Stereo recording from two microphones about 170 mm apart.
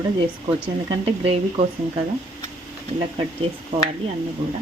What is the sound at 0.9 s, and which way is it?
Speech, 35° right (ahead or behind).